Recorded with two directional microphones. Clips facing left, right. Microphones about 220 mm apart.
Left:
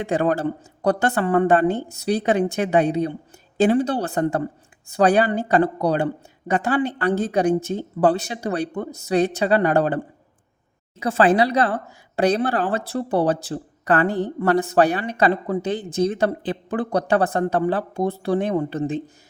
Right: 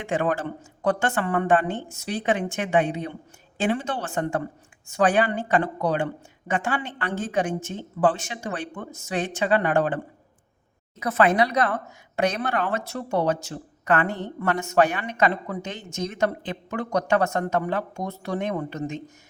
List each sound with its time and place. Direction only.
0.0 s speech: 35° left (ahead or behind)
11.0 s speech: 30° left (ahead or behind)